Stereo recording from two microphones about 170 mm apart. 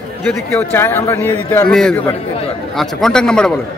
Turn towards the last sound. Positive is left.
turn(degrees=5)  # may be behind; listen again after turning